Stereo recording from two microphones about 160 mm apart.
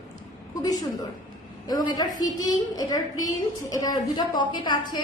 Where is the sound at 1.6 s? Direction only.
25° left (ahead or behind).